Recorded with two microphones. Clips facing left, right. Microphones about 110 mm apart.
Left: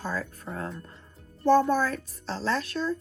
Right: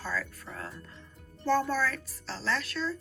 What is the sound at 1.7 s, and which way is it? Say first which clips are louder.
Speech: left 4 dB; 25° left (ahead or behind).